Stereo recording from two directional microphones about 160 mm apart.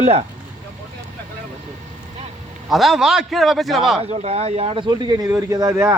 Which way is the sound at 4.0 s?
40° right (ahead or behind).